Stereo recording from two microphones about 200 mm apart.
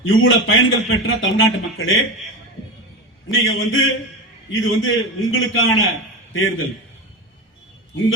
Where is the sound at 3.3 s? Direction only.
75° left (ahead or behind).